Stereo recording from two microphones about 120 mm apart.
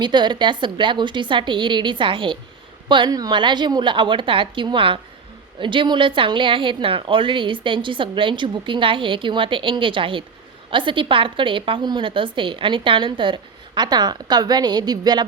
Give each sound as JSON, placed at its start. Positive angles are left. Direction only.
{"t": 0.0, "sound": "a woman's voice", "side_deg": -40}